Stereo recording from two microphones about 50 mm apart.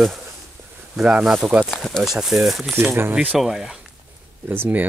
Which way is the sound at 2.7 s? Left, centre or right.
Right.